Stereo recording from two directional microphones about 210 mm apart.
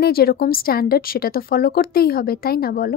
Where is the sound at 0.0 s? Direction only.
45° left (ahead or behind).